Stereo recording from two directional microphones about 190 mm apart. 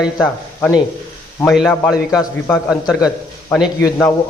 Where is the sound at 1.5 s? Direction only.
Centre (ahead or behind).